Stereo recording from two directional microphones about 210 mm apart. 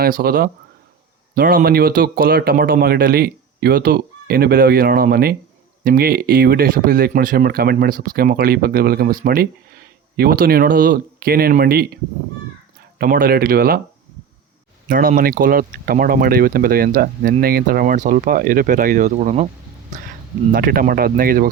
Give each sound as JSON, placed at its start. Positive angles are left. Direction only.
{"t": 0.0, "sound": "speech", "side_deg": -45}
{"t": 13.0, "sound": "speech", "side_deg": -45}
{"t": 14.8, "sound": "speech", "side_deg": -40}
{"t": 20.5, "sound": "speech", "side_deg": -45}